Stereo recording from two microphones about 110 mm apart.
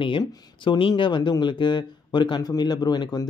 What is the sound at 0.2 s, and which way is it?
Speech, 50° left (ahead or behind).